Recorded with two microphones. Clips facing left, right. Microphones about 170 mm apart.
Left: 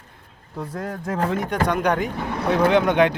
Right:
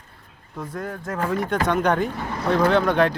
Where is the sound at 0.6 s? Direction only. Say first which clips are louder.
Left 1 dB; 30° left (ahead or behind).